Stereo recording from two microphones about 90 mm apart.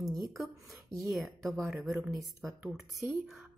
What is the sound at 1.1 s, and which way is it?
Speech, centre (ahead or behind).